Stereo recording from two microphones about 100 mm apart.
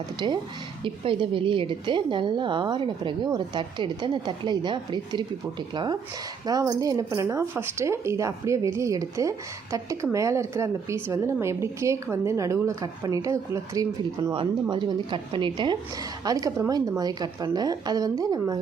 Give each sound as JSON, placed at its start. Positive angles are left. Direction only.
{"t": 0.2, "sound": "a woman's voice", "side_deg": -50}
{"t": 14.3, "sound": "a woman's voice", "side_deg": -55}
{"t": 16.2, "sound": "speech", "side_deg": -35}